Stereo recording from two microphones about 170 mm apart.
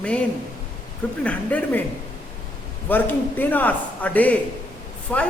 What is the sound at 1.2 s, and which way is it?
Speech, 10° left (ahead or behind).